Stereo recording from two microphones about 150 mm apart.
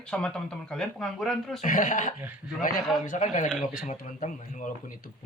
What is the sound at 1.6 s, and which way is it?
Speech, 60° left (ahead or behind).